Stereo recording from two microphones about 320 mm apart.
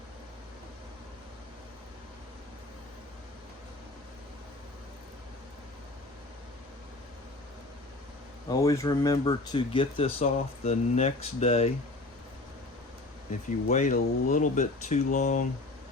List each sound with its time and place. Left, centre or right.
8.4 s speech: centre
13.7 s speech: left